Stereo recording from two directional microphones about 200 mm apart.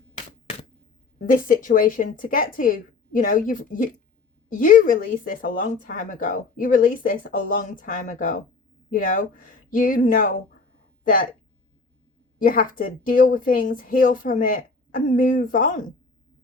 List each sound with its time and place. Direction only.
0.1 s a sound: 35° left (ahead or behind)
1.3 s speech: 45° left (ahead or behind)
12.4 s speech: 45° left (ahead or behind)